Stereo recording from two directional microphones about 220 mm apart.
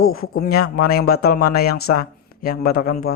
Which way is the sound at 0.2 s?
45° left (ahead or behind).